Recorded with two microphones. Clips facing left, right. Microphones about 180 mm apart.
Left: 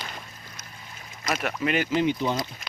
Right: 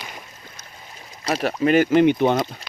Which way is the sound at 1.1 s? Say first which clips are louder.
Right 6 dB; 35° right (ahead or behind).